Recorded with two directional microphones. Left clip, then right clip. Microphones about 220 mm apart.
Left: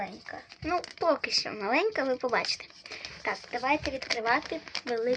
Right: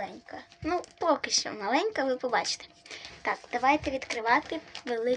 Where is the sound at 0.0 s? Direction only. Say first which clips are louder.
Left 1 dB; 15° left (ahead or behind).